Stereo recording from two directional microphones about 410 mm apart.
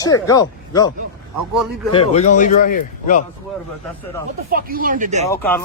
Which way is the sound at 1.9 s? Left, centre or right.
Centre.